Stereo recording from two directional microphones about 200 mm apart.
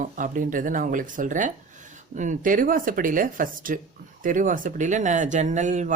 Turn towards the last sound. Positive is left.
turn(degrees=-35)  # may be behind; listen again after turning